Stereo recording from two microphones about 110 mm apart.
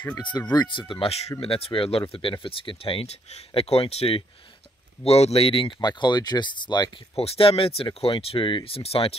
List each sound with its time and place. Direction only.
0.2 s speech: 40° left (ahead or behind)
7.2 s speech: 60° left (ahead or behind)